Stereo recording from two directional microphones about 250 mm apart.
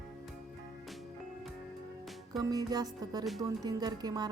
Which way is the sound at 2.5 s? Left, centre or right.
Centre.